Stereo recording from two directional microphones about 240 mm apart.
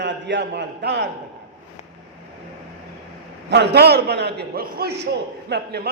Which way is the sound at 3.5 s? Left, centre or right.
Right.